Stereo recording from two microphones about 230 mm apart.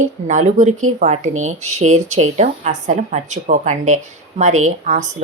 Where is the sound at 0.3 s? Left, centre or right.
Right.